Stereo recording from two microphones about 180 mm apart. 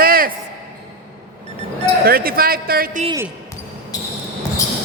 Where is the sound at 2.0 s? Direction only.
55° right (ahead or behind).